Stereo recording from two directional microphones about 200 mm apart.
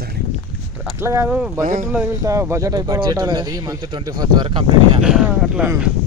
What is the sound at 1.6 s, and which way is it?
Speech, 45° right (ahead or behind).